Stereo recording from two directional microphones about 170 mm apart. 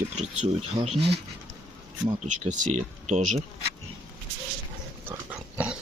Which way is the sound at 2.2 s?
45° right (ahead or behind).